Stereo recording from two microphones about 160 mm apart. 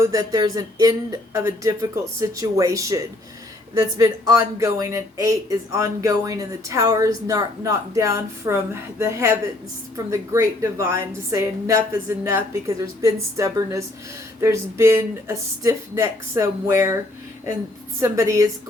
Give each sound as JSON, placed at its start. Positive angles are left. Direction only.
{"t": 0.0, "sound": "speech", "side_deg": -20}
{"t": 18.0, "sound": "speech", "side_deg": -20}